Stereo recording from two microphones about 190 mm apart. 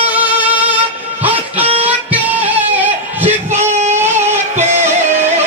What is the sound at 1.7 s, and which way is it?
Music, 10° right (ahead or behind).